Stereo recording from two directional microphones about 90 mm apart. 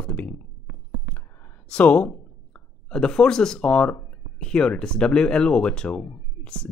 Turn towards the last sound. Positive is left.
turn(degrees=10)  # may be behind; listen again after turning